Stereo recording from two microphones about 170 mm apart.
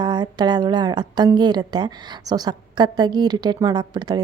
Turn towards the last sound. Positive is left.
turn(degrees=-25)  # may be behind; listen again after turning